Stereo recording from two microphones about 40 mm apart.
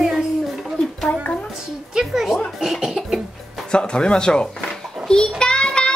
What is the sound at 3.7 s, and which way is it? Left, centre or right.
A child's voice, left.